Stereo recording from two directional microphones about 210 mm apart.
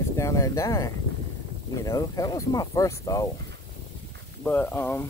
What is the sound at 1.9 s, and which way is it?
Speech, 15° left (ahead or behind).